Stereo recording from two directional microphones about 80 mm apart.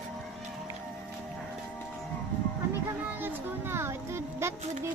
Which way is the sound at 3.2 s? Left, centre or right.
Right.